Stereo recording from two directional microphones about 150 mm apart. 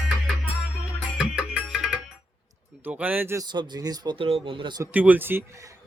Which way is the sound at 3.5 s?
25° right (ahead or behind).